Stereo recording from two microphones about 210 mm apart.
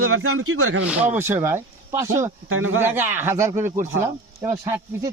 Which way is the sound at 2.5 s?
75° right (ahead or behind).